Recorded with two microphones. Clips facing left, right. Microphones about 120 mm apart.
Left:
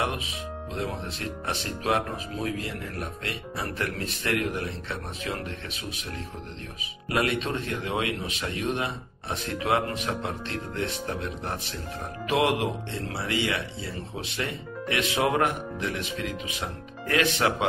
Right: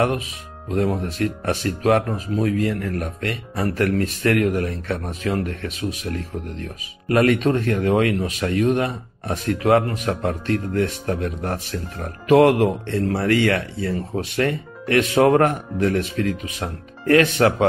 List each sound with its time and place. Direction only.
0.8 s speech: 45° right (ahead or behind)